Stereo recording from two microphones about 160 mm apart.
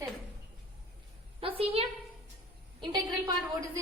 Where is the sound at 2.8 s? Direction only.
25° right (ahead or behind).